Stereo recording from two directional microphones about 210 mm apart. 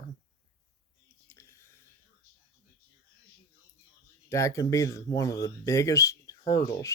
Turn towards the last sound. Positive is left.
turn(degrees=15)  # may be behind; listen again after turning